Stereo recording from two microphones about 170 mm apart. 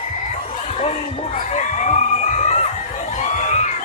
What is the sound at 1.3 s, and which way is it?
Crowd, 45° left (ahead or behind).